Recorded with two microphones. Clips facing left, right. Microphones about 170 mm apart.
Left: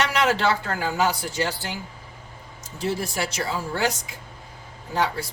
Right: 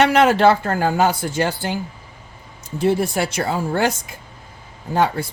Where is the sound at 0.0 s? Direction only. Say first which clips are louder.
Right 8 dB; 55° right (ahead or behind).